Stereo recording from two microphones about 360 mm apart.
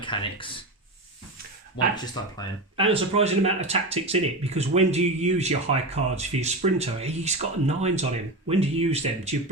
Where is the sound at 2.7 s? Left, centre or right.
Centre.